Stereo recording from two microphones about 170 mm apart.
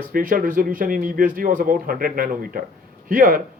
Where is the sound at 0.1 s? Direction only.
60° right (ahead or behind).